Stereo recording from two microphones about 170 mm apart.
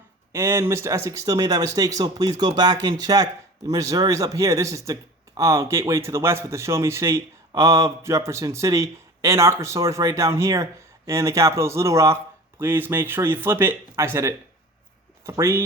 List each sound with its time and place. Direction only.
0.3 s speech: 15° right (ahead or behind)